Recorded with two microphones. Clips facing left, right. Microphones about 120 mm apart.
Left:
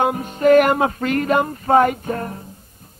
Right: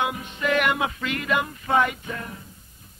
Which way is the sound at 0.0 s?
45° left (ahead or behind).